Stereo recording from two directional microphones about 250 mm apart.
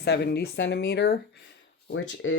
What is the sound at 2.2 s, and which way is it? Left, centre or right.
Speech, left.